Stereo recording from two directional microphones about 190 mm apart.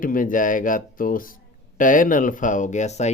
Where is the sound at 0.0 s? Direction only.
45° left (ahead or behind).